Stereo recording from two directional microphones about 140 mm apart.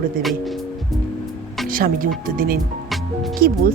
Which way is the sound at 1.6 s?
90° right.